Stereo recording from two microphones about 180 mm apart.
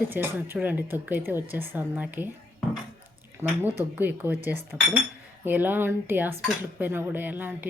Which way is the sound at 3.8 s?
10° right (ahead or behind).